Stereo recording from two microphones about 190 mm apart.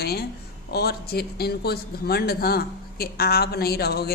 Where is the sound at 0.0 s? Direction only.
55° left (ahead or behind).